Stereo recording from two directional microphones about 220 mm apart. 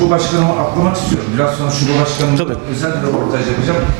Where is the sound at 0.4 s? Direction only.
25° right (ahead or behind).